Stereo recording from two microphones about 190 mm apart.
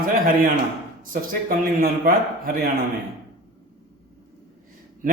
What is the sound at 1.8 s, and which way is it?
Speech, 50° right (ahead or behind).